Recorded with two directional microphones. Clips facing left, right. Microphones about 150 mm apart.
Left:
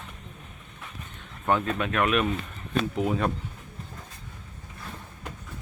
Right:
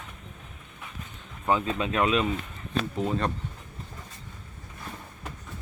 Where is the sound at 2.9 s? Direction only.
5° left (ahead or behind).